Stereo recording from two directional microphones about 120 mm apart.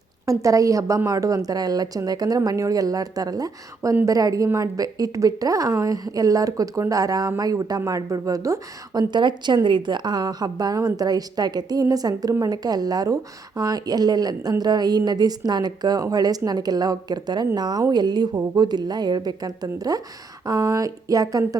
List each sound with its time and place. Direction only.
0.3 s a woman's voice: 25° right (ahead or behind)